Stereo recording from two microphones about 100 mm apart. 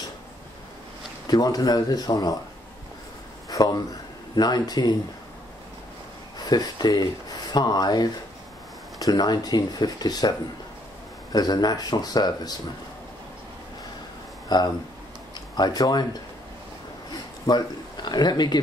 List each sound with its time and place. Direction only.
1.2 s speech: 40° left (ahead or behind)
3.4 s speech: 40° left (ahead or behind)
6.3 s speech: 40° left (ahead or behind)
11.3 s speech: 40° left (ahead or behind)
14.5 s speech: 45° left (ahead or behind)
17.5 s a man's voice: 45° left (ahead or behind)